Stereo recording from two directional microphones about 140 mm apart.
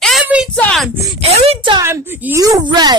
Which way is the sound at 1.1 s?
50° right (ahead or behind).